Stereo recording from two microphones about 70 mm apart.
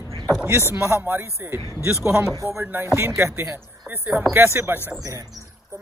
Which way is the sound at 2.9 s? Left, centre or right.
Right.